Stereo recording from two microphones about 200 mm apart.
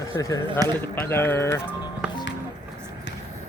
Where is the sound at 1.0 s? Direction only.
10° left (ahead or behind).